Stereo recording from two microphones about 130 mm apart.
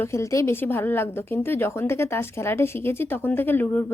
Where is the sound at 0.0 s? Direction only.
20° left (ahead or behind).